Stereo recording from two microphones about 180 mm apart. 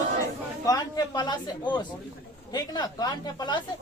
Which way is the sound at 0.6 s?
20° left (ahead or behind).